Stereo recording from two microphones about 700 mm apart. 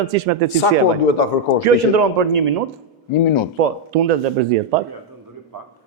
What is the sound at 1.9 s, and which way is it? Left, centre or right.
Speech, right.